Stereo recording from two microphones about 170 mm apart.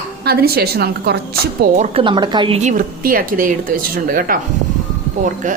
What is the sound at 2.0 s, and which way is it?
Speech, 25° right (ahead or behind).